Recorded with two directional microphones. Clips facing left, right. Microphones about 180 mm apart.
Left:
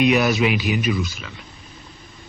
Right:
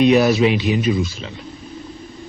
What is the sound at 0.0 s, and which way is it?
A man's voice, 30° right (ahead or behind).